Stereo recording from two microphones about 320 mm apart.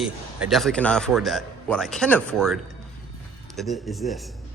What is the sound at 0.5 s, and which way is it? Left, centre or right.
Speech, centre.